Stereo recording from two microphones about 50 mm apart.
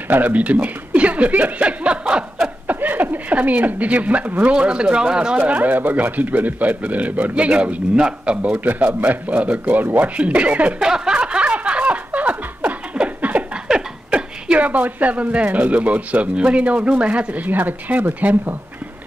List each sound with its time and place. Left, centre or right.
0.1 s speech: right
2.6 s a sound: right
4.4 s speech: right
5.4 s speech: right
8.5 s speech: right
10.8 s snicker: centre; by 12.7 s right
12.9 s a sound: right
13.7 s speech: centre; by 18.6 s right